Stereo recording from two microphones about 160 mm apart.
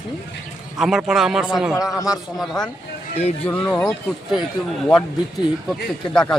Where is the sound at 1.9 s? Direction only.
20° left (ahead or behind).